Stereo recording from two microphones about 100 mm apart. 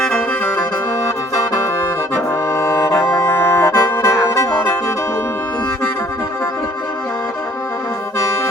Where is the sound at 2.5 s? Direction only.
35° left (ahead or behind).